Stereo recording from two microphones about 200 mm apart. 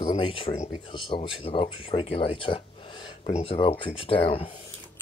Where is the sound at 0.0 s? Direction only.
25° left (ahead or behind).